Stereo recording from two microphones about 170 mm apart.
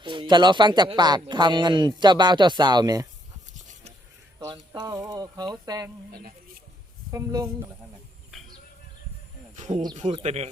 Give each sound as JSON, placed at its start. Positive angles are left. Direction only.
{"t": 0.0, "sound": "speech", "side_deg": -30}
{"t": 4.4, "sound": "speech", "side_deg": -25}
{"t": 6.1, "sound": "speech", "side_deg": -60}
{"t": 7.1, "sound": "speech", "side_deg": -20}
{"t": 8.3, "sound": "a sound", "side_deg": 0}
{"t": 9.6, "sound": "speech", "side_deg": -45}